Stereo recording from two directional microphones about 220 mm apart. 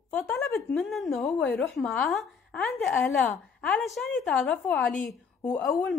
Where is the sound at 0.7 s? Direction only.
Centre (ahead or behind).